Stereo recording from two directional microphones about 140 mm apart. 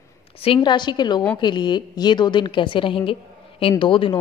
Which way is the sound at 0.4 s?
35° left (ahead or behind).